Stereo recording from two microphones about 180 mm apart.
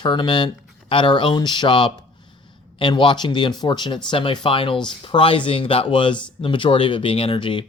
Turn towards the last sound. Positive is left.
turn(degrees=30)  # may be behind; listen again after turning